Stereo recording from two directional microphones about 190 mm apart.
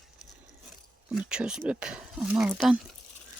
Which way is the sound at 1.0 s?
5° right (ahead or behind).